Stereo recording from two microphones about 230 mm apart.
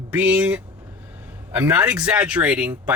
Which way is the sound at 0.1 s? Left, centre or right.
Centre.